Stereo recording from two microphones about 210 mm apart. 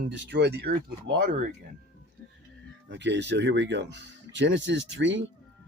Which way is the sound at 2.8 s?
60° right (ahead or behind).